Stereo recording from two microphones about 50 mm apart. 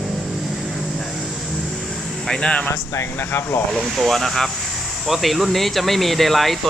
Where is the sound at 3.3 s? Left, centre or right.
Left.